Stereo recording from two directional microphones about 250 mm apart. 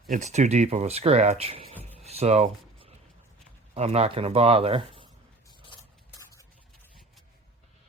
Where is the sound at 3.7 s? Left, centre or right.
Right.